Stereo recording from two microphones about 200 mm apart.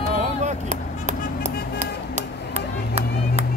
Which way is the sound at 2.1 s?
35° right (ahead or behind).